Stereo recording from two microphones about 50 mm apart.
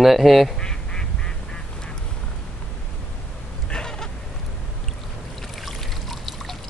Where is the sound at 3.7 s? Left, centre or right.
Centre.